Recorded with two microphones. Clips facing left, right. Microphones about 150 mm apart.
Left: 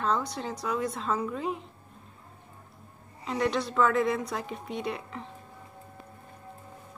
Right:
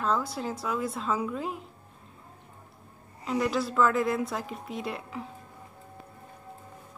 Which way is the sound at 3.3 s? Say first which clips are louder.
Right 1 dB; 5° right (ahead or behind).